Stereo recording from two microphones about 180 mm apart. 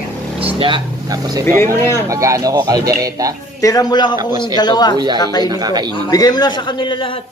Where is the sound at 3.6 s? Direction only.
20° left (ahead or behind).